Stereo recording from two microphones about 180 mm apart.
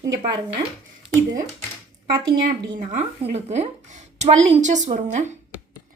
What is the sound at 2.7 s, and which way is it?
Speech, 40° right (ahead or behind).